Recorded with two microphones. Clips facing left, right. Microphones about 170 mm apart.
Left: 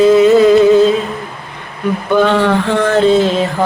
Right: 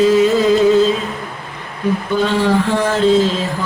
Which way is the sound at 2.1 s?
65° left (ahead or behind).